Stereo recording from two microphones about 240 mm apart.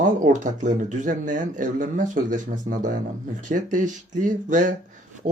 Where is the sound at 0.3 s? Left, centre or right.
Right.